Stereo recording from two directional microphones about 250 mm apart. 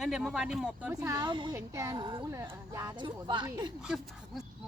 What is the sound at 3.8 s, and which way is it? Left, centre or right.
Speech, centre.